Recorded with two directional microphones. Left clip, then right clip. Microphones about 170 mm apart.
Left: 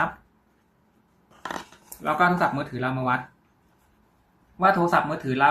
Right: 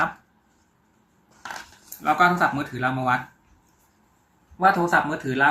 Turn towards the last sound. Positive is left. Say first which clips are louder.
# even
turn(degrees=20)  # may be behind; listen again after turning